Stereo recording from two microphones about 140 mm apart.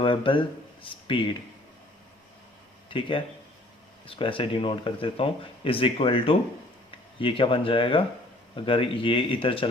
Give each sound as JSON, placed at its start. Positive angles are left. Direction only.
{"t": 0.0, "sound": "speech", "side_deg": 40}
{"t": 2.9, "sound": "speech", "side_deg": 40}